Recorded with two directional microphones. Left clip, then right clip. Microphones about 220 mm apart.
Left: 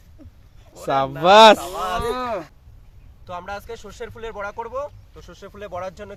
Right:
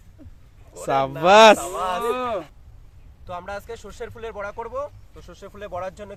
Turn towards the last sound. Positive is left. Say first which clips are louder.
# even
turn(degrees=0)  # may be behind; listen again after turning